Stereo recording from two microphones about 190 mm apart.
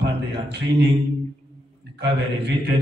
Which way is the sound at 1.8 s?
60° right (ahead or behind).